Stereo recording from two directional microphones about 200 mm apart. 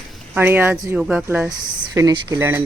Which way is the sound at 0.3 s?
10° right (ahead or behind).